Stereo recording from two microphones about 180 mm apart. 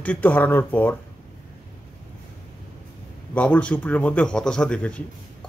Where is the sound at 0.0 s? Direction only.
10° left (ahead or behind).